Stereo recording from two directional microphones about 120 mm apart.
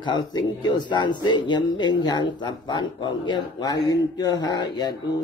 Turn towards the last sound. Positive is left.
turn(degrees=35)  # may be behind; listen again after turning